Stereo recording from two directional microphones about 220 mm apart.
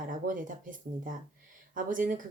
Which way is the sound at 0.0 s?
35° right (ahead or behind).